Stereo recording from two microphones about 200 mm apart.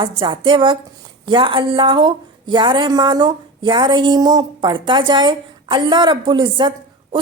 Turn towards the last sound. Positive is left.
turn(degrees=-25)  # may be behind; listen again after turning